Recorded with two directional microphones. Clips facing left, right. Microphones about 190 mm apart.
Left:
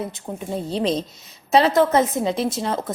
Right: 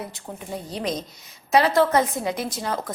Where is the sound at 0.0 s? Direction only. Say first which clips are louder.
Left 6 dB; 25° left (ahead or behind).